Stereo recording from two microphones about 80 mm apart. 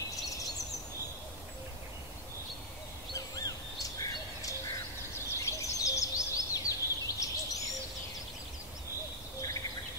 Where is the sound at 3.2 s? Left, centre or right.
Left.